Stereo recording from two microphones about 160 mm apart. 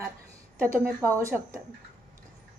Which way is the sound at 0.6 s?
15° right (ahead or behind).